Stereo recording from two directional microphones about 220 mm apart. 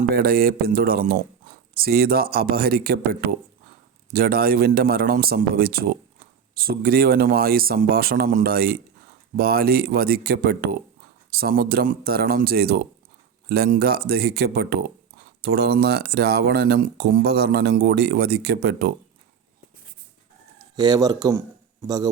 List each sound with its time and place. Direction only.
0.1 s speech: 45° right (ahead or behind)
20.7 s speech: 15° right (ahead or behind)